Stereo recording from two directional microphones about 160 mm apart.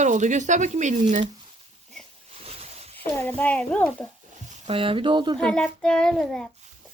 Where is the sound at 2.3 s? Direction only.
40° right (ahead or behind).